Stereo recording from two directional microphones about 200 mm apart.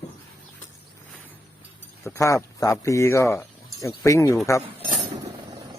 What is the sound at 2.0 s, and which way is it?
Speech, 15° left (ahead or behind).